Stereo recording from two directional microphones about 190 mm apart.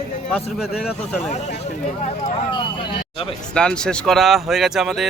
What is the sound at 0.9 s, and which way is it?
Speech, 35° left (ahead or behind).